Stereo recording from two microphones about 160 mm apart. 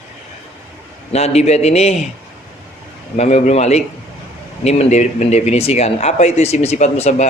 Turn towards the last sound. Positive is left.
turn(degrees=45)  # may be behind; listen again after turning